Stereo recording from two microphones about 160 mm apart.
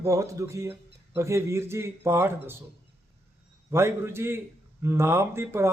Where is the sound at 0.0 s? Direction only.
20° right (ahead or behind).